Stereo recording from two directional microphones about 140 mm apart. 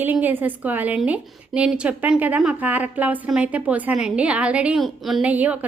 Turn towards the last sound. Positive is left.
turn(degrees=-10)  # may be behind; listen again after turning